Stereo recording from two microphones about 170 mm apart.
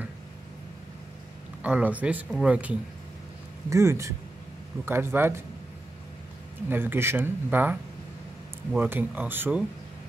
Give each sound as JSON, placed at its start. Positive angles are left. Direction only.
{"t": 1.6, "sound": "speech", "side_deg": -10}
{"t": 6.7, "sound": "speech", "side_deg": -10}
{"t": 8.7, "sound": "speech", "side_deg": -10}